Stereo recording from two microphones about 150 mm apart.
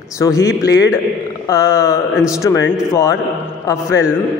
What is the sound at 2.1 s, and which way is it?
Speech, 5° right (ahead or behind).